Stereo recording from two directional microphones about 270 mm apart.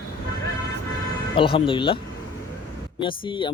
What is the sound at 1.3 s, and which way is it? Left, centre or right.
Speech, centre.